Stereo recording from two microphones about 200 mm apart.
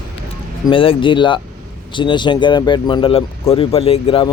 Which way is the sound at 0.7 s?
25° left (ahead or behind).